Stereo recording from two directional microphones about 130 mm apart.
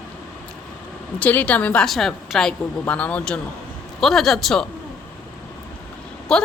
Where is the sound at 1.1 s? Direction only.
10° left (ahead or behind).